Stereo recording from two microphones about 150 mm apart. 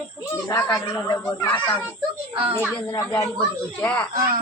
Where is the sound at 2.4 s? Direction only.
40° right (ahead or behind).